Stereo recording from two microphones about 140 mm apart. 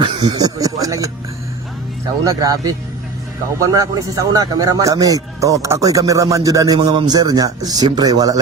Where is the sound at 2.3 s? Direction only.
25° right (ahead or behind).